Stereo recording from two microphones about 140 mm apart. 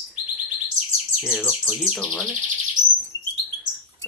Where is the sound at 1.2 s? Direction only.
Centre (ahead or behind).